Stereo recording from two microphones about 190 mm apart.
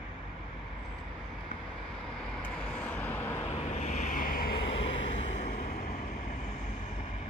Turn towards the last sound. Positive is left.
turn(degrees=40)  # may be behind; listen again after turning